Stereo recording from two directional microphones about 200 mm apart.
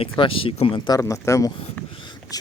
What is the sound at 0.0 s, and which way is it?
Speech, 25° left (ahead or behind).